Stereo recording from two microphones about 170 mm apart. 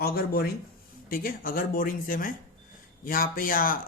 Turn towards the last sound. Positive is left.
turn(degrees=55)  # may be behind; listen again after turning